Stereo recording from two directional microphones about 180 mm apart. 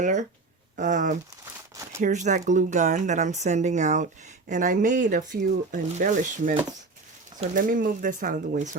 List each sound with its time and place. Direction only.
0.0 s speech: 40° right (ahead or behind)